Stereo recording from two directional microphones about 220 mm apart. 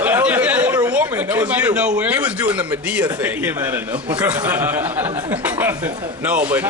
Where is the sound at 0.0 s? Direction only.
5° right (ahead or behind).